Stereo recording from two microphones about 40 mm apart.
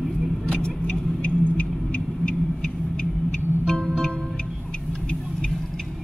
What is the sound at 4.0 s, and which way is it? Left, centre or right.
Music, centre.